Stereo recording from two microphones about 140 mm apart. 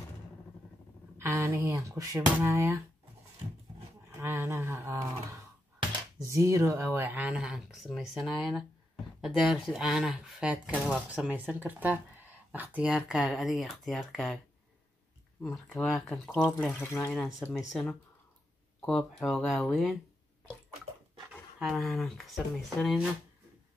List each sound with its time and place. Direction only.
1.1 s speech: 20° right (ahead or behind)
4.2 s speech: 20° right (ahead or behind); by 14.4 s centre (ahead or behind)
15.4 s speech: 5° left (ahead or behind)
17.1 s speech: centre (ahead or behind)
21.5 s speech: centre (ahead or behind)